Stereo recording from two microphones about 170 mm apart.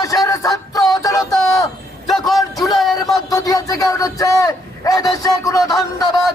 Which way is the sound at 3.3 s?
20° left (ahead or behind).